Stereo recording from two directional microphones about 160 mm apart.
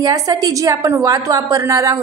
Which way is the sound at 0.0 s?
25° right (ahead or behind).